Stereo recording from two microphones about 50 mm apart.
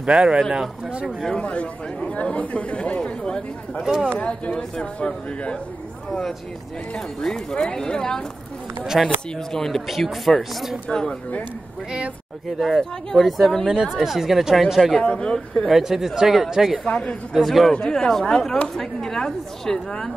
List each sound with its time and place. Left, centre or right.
0.0 s speech: right
1.3 s speech: left
6.0 s speech: centre
9.0 s speech: centre
10.9 s speech: centre
12.5 s speech: centre
13.7 s speech: centre
15.0 s speech: centre
15.7 s speech: centre
16.8 s speech: left
17.3 s speech: centre
17.7 s speech: centre